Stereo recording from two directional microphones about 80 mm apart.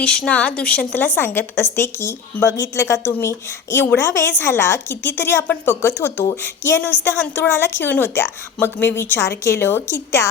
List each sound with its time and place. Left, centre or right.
0.0 s a woman's voice: centre; by 10.2 s left